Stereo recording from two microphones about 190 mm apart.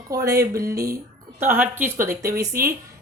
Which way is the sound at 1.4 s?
10° right (ahead or behind).